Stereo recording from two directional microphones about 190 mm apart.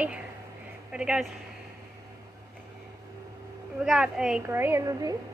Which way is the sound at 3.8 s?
5° right (ahead or behind).